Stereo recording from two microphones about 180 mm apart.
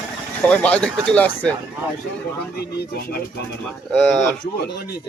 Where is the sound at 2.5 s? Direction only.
60° left (ahead or behind).